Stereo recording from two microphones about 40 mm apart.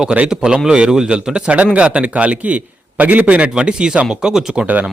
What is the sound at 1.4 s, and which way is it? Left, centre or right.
A man's voice, right.